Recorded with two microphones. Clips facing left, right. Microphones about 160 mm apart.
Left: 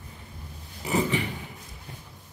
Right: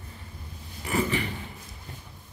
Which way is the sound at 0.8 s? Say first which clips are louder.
Left 1 dB; 20° left (ahead or behind).